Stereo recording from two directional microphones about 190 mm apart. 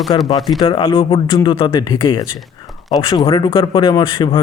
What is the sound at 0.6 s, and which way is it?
A man's voice, 25° left (ahead or behind).